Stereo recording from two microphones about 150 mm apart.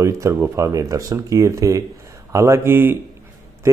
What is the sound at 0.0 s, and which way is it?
Speech, 20° right (ahead or behind).